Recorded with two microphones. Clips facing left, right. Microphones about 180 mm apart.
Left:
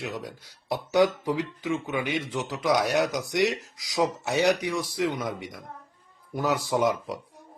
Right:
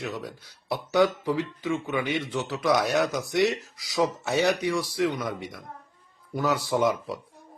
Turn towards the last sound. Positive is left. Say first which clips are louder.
# even
turn(degrees=15)  # may be behind; listen again after turning